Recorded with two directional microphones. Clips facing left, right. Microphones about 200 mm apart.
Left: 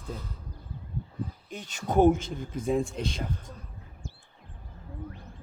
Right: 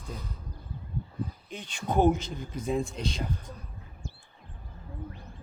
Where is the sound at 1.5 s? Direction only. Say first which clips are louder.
Left 2 dB; 45° left (ahead or behind).